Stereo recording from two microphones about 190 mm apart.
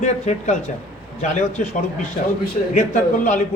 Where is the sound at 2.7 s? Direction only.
40° left (ahead or behind).